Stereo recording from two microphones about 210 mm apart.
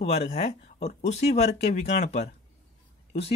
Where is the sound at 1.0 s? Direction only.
30° left (ahead or behind).